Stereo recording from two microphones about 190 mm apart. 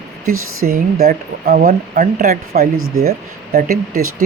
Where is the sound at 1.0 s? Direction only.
55° right (ahead or behind).